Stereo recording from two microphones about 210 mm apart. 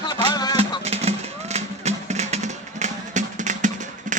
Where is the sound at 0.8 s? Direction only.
30° right (ahead or behind).